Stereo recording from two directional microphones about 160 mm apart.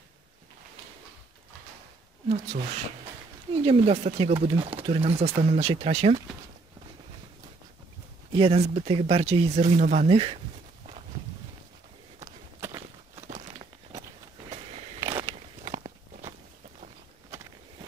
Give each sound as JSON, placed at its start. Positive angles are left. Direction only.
{"t": 2.2, "sound": "speech", "side_deg": -45}
{"t": 8.3, "sound": "speech", "side_deg": -35}
{"t": 12.5, "sound": "walk", "side_deg": -20}
{"t": 13.2, "sound": "a sound", "side_deg": -40}
{"t": 15.8, "sound": "walk", "side_deg": -45}